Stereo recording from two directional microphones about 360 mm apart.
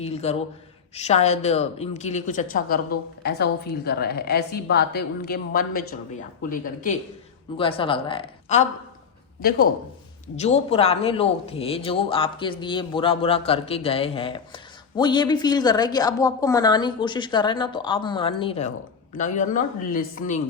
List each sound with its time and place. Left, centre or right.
0.0 s a man's voice: centre
7.5 s a man's voice: centre